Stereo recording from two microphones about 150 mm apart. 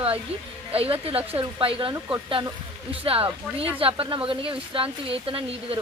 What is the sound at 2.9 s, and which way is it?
Speech, 35° right (ahead or behind).